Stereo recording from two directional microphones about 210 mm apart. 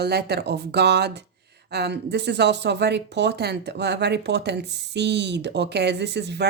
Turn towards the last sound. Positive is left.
turn(degrees=-55)  # may be behind; listen again after turning